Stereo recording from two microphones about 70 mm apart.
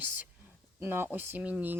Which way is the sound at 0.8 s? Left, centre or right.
Right.